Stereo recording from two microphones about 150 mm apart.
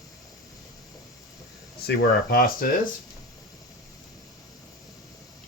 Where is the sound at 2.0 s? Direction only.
85° left.